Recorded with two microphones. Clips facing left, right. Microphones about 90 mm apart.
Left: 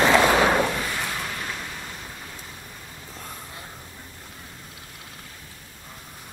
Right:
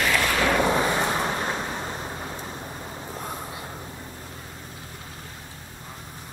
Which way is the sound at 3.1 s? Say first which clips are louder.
Right 5 dB; 30° right (ahead or behind).